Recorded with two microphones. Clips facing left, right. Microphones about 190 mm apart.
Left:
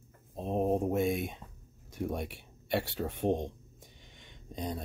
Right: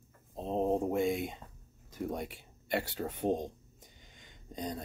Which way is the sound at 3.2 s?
25° left (ahead or behind).